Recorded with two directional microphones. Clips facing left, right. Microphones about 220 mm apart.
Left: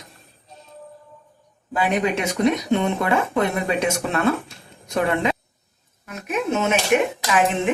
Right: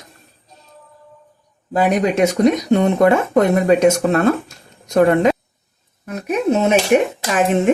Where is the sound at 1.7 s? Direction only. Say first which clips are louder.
Right 5 dB; 40° right (ahead or behind).